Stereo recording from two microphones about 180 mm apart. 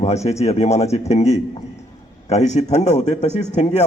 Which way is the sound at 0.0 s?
35° left (ahead or behind).